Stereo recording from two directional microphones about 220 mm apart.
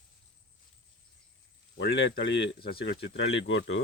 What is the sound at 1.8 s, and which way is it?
Speech, 55° left (ahead or behind).